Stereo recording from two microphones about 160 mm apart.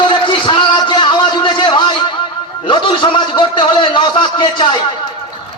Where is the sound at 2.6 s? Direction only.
30° left (ahead or behind).